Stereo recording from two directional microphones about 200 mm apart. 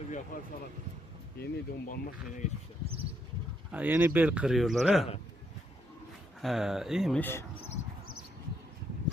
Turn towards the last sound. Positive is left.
turn(degrees=10)  # may be behind; listen again after turning